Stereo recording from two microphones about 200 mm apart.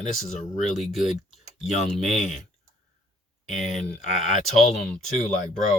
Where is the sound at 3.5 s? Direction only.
40° left (ahead or behind).